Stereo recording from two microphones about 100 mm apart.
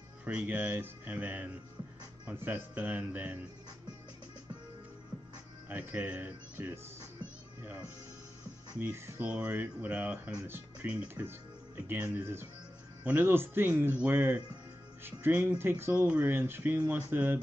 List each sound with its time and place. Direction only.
0.2 s speech: 15° right (ahead or behind)
5.7 s speech: 20° right (ahead or behind)
8.7 s speech: 20° right (ahead or behind)